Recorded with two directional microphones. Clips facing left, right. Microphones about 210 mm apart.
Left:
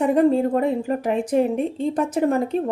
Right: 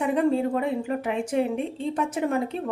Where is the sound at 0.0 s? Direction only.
40° left (ahead or behind).